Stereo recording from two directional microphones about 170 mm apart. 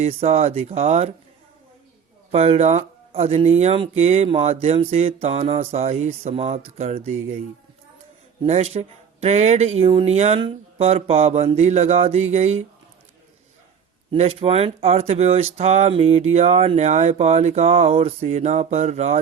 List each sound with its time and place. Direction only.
0.0 s speech: 40° right (ahead or behind)
2.3 s speech: 40° right (ahead or behind)
8.4 s speech: 40° right (ahead or behind)
14.1 s speech: 35° right (ahead or behind)